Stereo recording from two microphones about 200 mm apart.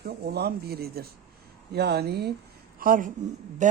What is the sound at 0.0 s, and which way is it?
Speech, 50° right (ahead or behind).